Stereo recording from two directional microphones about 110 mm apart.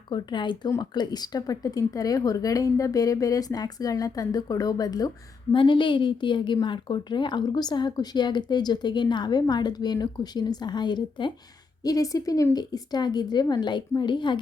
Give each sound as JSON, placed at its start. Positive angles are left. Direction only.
{"t": 0.1, "sound": "a woman's voice", "side_deg": 45}
{"t": 5.5, "sound": "a woman's voice", "side_deg": 45}